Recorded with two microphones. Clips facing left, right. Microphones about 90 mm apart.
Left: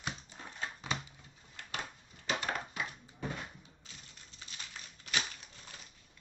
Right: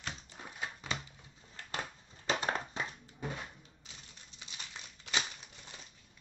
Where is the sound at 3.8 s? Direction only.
20° right (ahead or behind).